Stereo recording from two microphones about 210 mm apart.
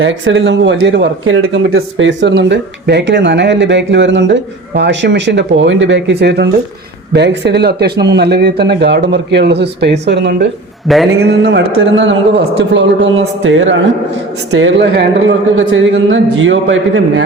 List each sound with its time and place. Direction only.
0.0 s speech: 65° right (ahead or behind)
1.4 s speech: 70° right (ahead or behind)